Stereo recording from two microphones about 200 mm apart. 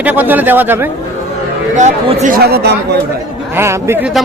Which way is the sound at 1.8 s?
35° right (ahead or behind).